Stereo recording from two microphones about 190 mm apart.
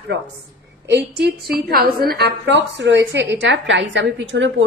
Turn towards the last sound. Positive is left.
turn(degrees=-70)  # may be behind; listen again after turning